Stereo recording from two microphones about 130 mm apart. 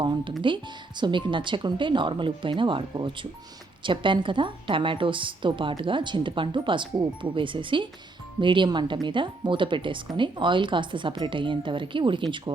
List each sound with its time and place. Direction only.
0.0 s speech: 35° right (ahead or behind)